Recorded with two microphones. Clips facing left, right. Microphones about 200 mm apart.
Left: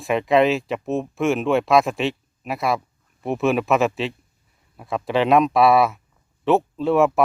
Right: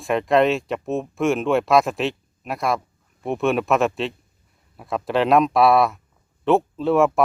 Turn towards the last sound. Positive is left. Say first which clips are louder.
# even
turn(degrees=0)  # may be behind; listen again after turning